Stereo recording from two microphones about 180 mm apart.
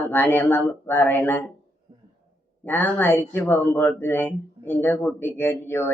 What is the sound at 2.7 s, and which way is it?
Speech, 10° left (ahead or behind).